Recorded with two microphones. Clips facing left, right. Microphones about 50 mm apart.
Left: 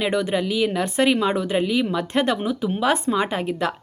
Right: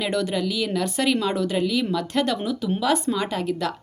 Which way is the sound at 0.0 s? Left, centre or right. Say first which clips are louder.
Left 2 dB; left.